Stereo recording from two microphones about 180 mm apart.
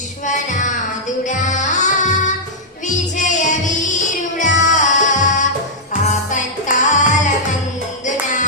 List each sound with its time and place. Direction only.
0.3 s music: 45° left (ahead or behind)